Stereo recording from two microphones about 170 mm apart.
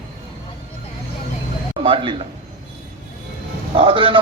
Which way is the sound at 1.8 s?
30° right (ahead or behind).